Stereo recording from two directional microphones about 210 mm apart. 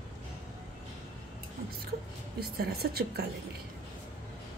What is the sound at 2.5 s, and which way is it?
Speech, 45° right (ahead or behind).